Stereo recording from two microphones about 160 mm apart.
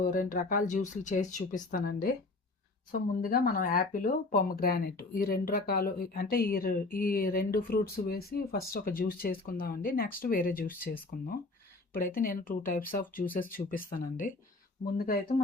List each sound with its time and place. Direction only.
0.0 s speech: 55° left (ahead or behind)